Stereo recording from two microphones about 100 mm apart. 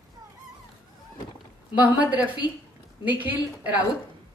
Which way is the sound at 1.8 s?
15° right (ahead or behind).